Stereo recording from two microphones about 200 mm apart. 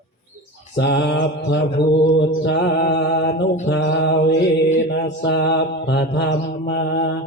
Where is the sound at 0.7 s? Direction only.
60° left (ahead or behind).